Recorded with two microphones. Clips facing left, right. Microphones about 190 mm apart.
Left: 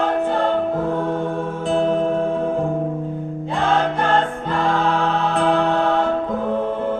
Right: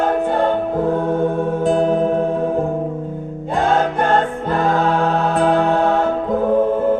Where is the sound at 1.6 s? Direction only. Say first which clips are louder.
Right 2 dB; 45° right (ahead or behind).